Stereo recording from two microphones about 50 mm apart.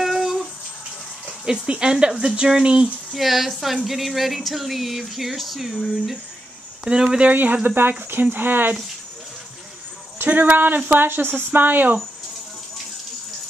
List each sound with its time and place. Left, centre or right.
0.0 s a sound: centre
1.2 s speech: centre
3.1 s speech: centre
6.8 s speech: centre
7.2 s speech: right
10.1 s speech: right